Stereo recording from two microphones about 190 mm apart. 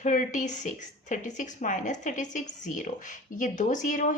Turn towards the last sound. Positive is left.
turn(degrees=40)  # may be behind; listen again after turning